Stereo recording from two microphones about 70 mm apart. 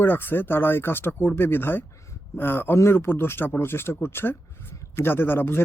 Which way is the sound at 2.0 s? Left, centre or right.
Left.